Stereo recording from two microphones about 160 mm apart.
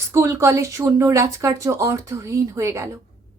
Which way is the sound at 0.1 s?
15° right (ahead or behind).